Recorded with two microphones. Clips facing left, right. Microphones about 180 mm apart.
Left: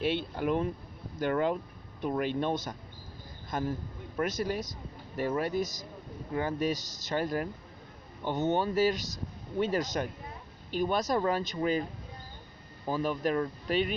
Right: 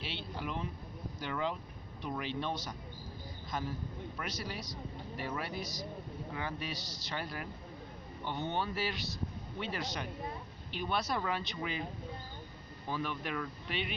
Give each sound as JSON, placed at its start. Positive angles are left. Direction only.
{"t": 0.0, "sound": "speech", "side_deg": 50}
{"t": 12.9, "sound": "speech", "side_deg": 40}